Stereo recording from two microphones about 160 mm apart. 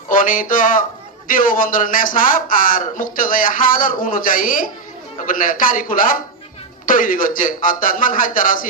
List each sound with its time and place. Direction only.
0.1 s speech: 55° left (ahead or behind)